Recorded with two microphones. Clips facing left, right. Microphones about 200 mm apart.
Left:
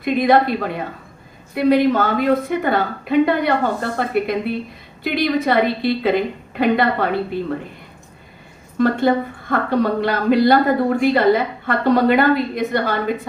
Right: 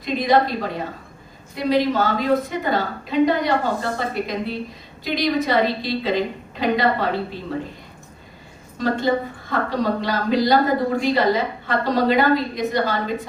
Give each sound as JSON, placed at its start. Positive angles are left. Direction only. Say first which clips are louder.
{"t": 0.0, "sound": "a woman's voice", "louder": "left 3 dB", "side_deg": 60}
{"t": 8.8, "sound": "a woman's voice", "louder": "left 4 dB", "side_deg": 55}